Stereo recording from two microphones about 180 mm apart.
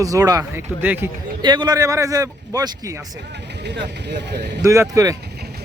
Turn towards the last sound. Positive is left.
turn(degrees=-15)  # may be behind; listen again after turning